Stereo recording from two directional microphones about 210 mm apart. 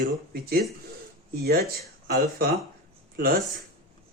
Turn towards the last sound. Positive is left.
turn(degrees=-45)  # may be behind; listen again after turning